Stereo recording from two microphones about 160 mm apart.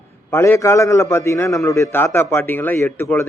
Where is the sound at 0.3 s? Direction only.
15° left (ahead or behind).